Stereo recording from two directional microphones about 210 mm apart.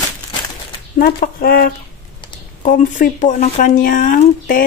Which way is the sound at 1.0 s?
45° left (ahead or behind).